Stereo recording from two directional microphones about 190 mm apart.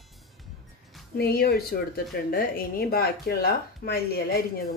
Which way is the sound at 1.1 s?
55° left (ahead or behind).